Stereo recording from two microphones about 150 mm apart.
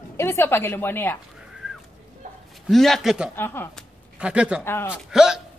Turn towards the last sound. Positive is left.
turn(degrees=-5)  # may be behind; listen again after turning